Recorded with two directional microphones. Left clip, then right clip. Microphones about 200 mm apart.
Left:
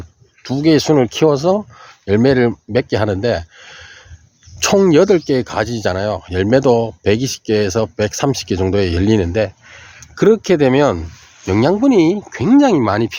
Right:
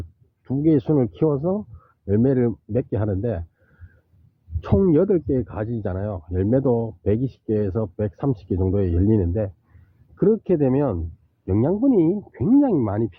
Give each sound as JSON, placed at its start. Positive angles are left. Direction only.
{"t": 0.6, "sound": "speech", "side_deg": 10}
{"t": 4.6, "sound": "speech", "side_deg": 15}